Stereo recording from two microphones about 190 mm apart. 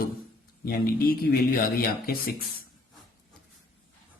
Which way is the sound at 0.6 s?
50° left (ahead or behind).